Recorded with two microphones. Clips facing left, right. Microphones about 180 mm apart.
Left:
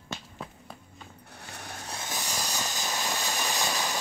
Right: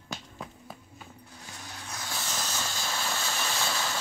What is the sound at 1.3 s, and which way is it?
Zipper, 65° left (ahead or behind).